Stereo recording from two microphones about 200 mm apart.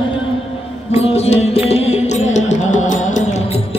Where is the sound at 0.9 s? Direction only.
30° left (ahead or behind).